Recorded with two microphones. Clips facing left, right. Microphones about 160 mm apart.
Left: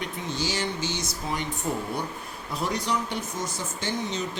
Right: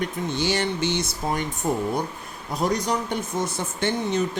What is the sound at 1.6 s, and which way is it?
Speech, 45° right (ahead or behind).